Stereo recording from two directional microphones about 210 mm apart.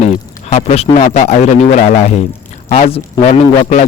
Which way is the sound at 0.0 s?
30° left (ahead or behind).